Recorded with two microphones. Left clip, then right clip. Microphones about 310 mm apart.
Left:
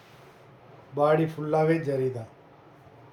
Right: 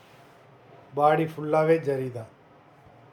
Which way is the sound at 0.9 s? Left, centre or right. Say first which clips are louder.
Right 1 dB; centre.